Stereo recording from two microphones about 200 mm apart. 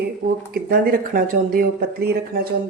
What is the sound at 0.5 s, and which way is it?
Speech, 45° right (ahead or behind).